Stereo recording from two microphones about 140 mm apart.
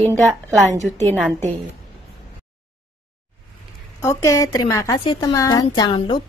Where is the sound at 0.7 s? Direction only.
55° right (ahead or behind).